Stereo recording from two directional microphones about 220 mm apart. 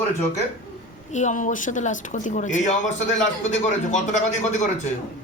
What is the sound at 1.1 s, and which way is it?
Speech, 35° left (ahead or behind).